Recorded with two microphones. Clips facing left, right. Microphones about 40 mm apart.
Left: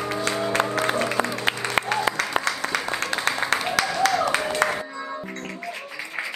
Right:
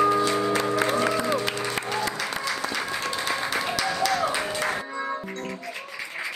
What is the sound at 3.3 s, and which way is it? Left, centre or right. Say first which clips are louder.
Music: left 4 dB; left.